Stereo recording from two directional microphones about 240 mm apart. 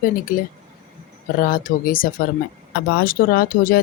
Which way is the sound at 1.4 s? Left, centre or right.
Left.